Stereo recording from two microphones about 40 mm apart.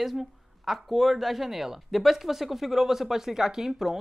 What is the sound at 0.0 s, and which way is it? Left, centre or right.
A woman's voice, centre.